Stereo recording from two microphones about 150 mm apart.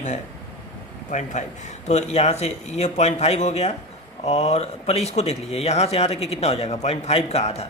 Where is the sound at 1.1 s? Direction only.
55° left (ahead or behind).